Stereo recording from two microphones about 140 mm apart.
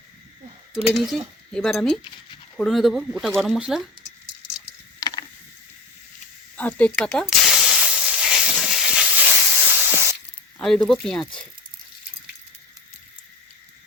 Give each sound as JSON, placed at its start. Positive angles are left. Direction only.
{"t": 0.9, "sound": "speech", "side_deg": 0}
{"t": 4.9, "sound": "a sound", "side_deg": 30}
{"t": 6.6, "sound": "hiss", "side_deg": 10}
{"t": 10.6, "sound": "speech", "side_deg": 5}